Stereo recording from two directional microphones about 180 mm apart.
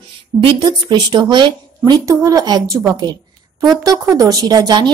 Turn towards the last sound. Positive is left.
turn(degrees=-20)  # may be behind; listen again after turning